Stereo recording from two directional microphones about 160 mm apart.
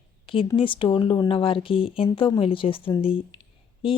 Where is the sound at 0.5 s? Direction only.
30° left (ahead or behind).